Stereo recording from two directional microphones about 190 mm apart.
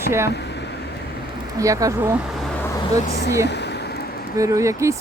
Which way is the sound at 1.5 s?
15° right (ahead or behind).